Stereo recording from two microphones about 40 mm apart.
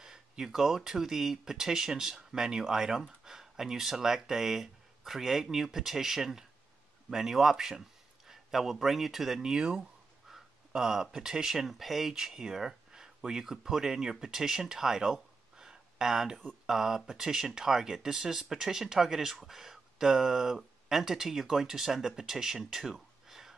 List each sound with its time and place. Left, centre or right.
0.0 s speech: centre
9.5 s speech: centre
15.5 s a sound: centre
16.6 s speech: centre